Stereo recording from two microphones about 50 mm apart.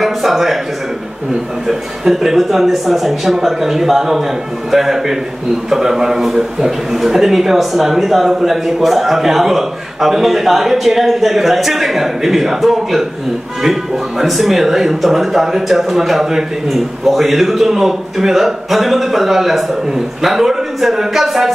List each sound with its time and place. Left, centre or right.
0.0 s a man's voice: centre
1.7 s a man's voice: centre